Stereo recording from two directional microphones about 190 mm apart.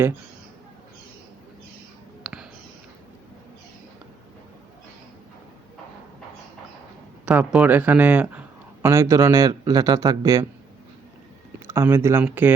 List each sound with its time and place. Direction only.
2.2 s a sound: 5° right (ahead or behind)
7.3 s a man's voice: 5° right (ahead or behind)
11.6 s speech: 15° right (ahead or behind)